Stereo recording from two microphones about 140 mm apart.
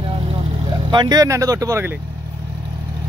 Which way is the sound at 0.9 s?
30° right (ahead or behind).